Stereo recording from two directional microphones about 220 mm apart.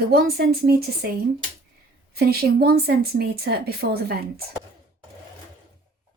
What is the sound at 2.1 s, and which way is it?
Speech, 45° right (ahead or behind).